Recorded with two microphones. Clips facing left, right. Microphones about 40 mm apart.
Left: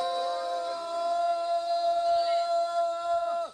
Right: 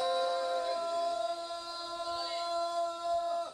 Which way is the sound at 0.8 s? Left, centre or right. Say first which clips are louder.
Left 3 dB; left.